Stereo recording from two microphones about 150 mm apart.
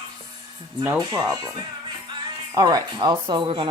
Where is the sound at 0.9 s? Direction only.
20° right (ahead or behind).